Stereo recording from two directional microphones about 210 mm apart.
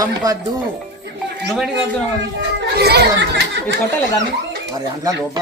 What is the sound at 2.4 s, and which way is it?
Music, 50° right (ahead or behind).